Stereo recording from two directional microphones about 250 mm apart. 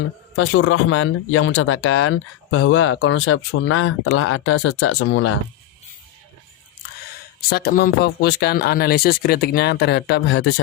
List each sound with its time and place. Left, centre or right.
0.3 s speech: left
7.5 s speech: left